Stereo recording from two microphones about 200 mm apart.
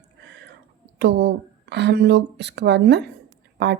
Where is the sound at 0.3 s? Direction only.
60° right (ahead or behind).